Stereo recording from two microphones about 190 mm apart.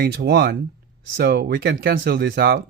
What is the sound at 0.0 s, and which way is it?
Speech, 55° right (ahead or behind).